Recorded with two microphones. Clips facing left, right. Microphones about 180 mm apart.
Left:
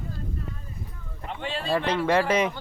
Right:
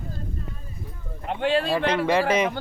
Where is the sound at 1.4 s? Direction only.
75° right (ahead or behind).